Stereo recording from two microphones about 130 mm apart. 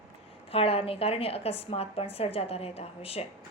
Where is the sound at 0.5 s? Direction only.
50° left (ahead or behind).